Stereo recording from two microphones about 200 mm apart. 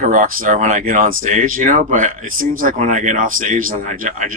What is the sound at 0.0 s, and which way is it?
Speech, 40° right (ahead or behind).